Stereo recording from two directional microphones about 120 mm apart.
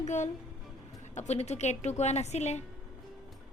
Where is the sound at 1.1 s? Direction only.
65° left (ahead or behind).